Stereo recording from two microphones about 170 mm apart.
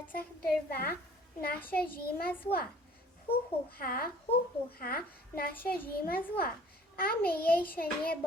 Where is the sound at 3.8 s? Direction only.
60° left (ahead or behind).